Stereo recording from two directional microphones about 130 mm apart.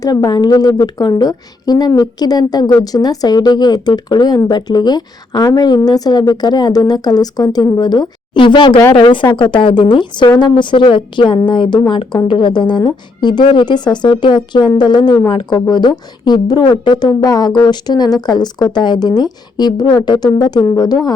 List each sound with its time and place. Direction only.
0.0 s a woman's voice: 30° left (ahead or behind)